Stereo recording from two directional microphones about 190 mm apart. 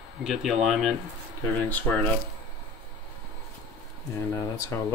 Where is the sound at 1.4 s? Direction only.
10° left (ahead or behind).